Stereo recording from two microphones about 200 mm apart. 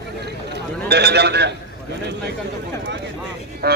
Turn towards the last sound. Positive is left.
turn(degrees=-55)  # may be behind; listen again after turning